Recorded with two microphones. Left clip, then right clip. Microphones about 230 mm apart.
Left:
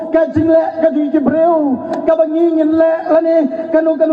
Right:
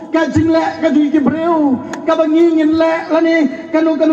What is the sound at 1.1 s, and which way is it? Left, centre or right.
Speech, right.